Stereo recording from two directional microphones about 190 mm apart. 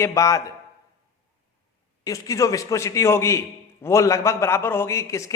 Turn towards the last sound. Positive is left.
turn(degrees=15)  # may be behind; listen again after turning